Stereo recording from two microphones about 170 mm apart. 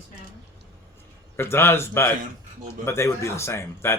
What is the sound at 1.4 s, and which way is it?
Speech, 15° left (ahead or behind).